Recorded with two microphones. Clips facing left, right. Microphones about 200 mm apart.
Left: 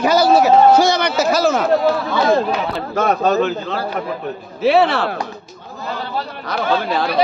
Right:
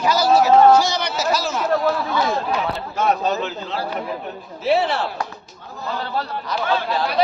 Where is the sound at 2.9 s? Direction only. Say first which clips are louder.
Left 5 dB; 50° left (ahead or behind).